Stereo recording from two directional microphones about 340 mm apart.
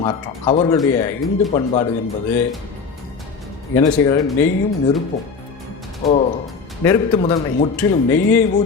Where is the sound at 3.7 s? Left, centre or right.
Centre.